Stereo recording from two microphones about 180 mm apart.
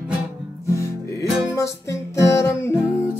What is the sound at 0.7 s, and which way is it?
Music, 15° left (ahead or behind).